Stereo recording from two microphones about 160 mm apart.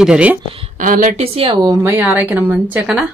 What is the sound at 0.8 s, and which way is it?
Speech, 60° right (ahead or behind).